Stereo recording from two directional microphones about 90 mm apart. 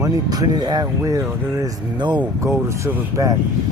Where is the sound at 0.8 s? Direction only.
35° right (ahead or behind).